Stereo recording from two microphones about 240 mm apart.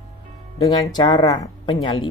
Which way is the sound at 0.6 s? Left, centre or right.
Centre.